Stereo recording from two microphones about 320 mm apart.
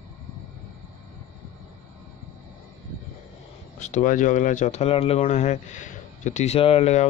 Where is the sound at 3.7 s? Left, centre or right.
Left.